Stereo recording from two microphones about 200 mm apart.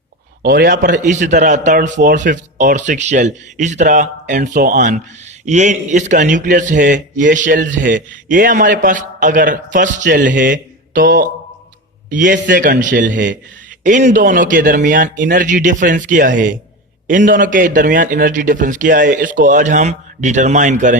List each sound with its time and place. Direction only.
0.4 s a man's voice: 50° right (ahead or behind)